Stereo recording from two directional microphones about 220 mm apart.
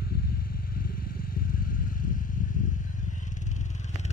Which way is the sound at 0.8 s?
40° left (ahead or behind).